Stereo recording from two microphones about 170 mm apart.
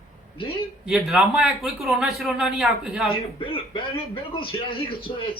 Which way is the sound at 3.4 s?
30° left (ahead or behind).